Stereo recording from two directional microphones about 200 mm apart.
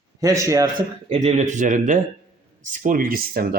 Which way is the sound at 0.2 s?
15° right (ahead or behind).